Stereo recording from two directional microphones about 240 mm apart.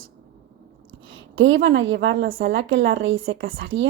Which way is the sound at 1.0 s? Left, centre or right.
Right.